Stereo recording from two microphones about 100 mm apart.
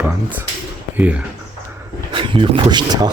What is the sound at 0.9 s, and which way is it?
Speech, 15° right (ahead or behind).